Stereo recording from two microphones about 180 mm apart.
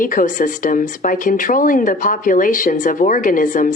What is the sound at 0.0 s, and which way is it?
Speech, 50° left (ahead or behind).